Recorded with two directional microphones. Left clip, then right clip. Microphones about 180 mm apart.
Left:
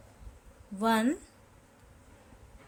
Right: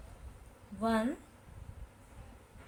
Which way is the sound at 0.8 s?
70° left (ahead or behind).